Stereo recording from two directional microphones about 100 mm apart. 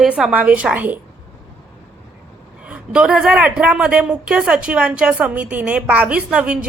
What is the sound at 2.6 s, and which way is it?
A woman's voice, 10° right (ahead or behind).